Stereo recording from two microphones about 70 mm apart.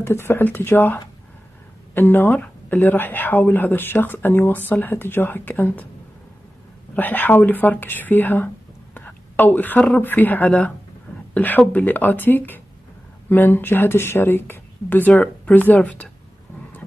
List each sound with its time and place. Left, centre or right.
0.0 s speech: left
7.0 s speech: left